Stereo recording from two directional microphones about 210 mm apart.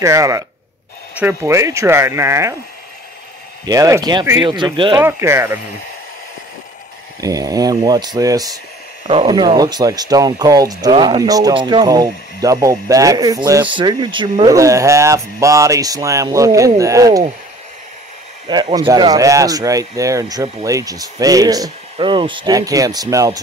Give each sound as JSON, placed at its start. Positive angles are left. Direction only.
{"t": 0.0, "sound": "speech", "side_deg": -15}
{"t": 3.6, "sound": "speech", "side_deg": -15}
{"t": 7.2, "sound": "speech", "side_deg": -15}
{"t": 18.5, "sound": "speech", "side_deg": -20}